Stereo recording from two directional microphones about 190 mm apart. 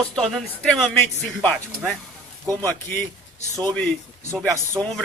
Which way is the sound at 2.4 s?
15° right (ahead or behind).